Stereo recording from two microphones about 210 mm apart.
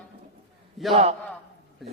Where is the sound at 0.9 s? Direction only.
30° right (ahead or behind).